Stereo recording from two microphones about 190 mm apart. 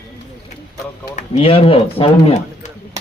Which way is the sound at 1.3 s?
30° left (ahead or behind).